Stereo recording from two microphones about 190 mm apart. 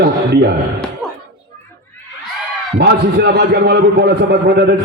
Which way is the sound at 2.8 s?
60° right (ahead or behind).